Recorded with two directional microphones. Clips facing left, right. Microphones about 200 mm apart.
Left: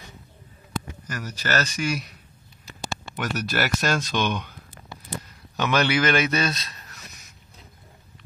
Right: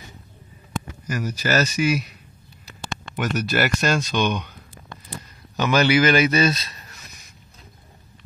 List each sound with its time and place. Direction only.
1.0 s a man's voice: 10° right (ahead or behind)